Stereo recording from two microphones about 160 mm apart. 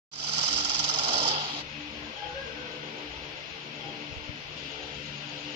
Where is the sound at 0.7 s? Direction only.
40° right (ahead or behind).